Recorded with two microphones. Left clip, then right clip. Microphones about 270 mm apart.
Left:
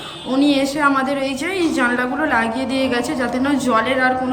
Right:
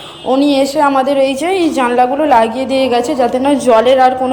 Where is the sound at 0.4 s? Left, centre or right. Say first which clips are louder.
Right 4 dB; centre.